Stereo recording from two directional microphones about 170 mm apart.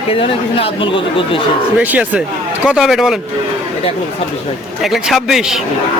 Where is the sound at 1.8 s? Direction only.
10° right (ahead or behind).